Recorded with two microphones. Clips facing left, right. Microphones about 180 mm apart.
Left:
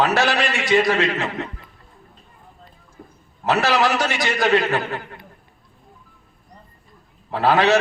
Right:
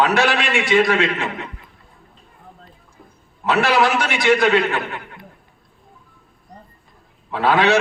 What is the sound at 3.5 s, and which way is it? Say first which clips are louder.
A man's voice: right 2 dB; 40° left (ahead or behind).